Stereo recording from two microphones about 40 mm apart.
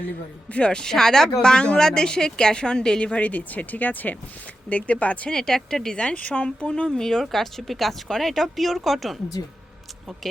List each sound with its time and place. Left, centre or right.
0.5 s speech: left
3.0 s speech: left
5.3 s speech: centre
6.1 s speech: left
6.7 s speech: centre